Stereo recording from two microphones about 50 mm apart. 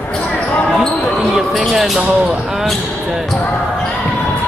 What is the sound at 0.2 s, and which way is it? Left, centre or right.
Basketball bounce, left.